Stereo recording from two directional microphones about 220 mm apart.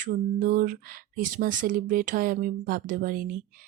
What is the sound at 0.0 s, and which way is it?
Speech, 35° right (ahead or behind).